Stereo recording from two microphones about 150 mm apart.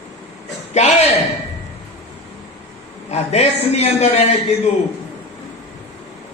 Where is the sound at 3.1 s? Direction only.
45° left (ahead or behind).